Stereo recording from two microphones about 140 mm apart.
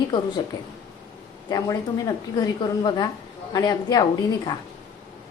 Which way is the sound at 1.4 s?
25° left (ahead or behind).